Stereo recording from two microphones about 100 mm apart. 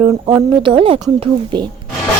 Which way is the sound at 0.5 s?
55° right (ahead or behind).